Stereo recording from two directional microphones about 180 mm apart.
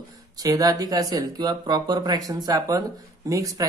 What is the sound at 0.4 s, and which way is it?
Speech, 20° right (ahead or behind).